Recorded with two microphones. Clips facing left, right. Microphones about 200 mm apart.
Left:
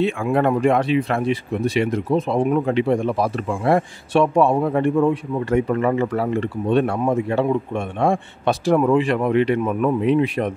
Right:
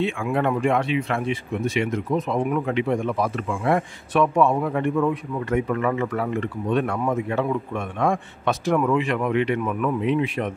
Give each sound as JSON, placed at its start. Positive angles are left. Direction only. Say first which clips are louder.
{"t": 0.0, "sound": "speech", "louder": "left 4 dB", "side_deg": 40}